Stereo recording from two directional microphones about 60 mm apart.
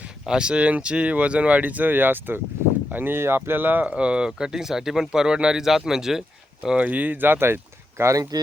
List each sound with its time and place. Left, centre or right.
0.3 s speech: centre
6.7 s speech: right
8.1 s speech: right